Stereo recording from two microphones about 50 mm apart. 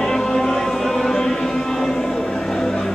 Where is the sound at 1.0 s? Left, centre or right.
Centre.